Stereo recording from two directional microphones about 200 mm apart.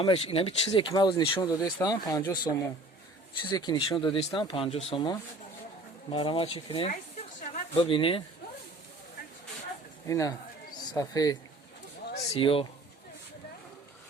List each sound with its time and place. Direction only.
0.0 s speech: 30° left (ahead or behind)
10.1 s speech: 15° left (ahead or behind)